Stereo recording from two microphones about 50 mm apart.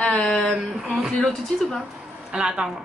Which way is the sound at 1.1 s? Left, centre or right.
Centre.